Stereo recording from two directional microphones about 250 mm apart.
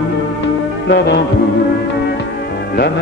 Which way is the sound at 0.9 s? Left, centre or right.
Left.